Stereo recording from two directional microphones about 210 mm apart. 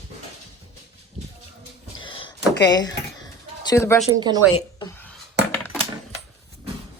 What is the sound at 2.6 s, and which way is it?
A woman's voice, 20° left (ahead or behind).